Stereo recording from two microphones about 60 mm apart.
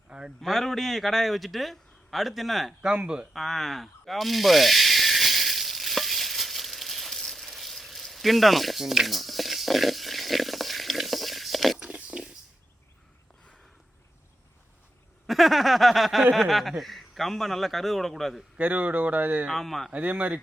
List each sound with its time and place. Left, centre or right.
0.1 s a sound: centre
0.4 s a man's voice: centre
2.8 s speech: centre
3.3 s snake: centre
12.1 s a sound: centre
15.3 s a sound: centre
16.3 s a man's voice: centre
18.5 s speech: right
19.5 s a man's voice: centre
19.9 s speech: right